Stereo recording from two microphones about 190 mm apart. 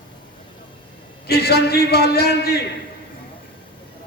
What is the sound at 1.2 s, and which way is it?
A man's voice, 55° left (ahead or behind).